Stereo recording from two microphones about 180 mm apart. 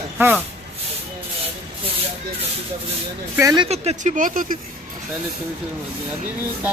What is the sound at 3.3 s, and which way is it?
Speech, 20° right (ahead or behind).